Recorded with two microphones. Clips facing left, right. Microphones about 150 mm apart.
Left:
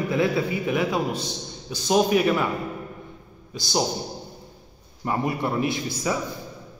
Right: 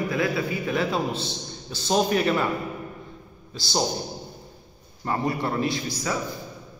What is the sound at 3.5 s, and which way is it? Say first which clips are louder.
Speech: left 1 dB; 15° left (ahead or behind).